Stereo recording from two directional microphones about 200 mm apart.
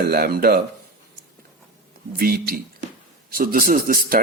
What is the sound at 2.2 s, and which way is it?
Speech, 50° right (ahead or behind).